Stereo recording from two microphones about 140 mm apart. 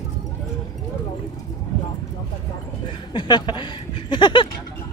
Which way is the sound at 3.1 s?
35° left (ahead or behind).